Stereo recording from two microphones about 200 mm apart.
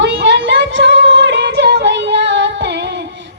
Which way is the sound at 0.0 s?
65° right (ahead or behind).